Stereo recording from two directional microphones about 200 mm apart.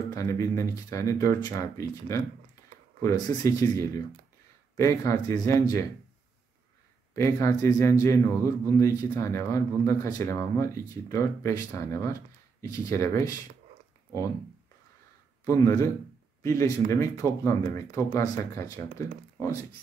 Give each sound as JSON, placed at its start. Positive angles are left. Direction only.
{"t": 0.1, "sound": "speech", "side_deg": 15}
{"t": 7.2, "sound": "speech", "side_deg": 15}
{"t": 15.4, "sound": "speech", "side_deg": 15}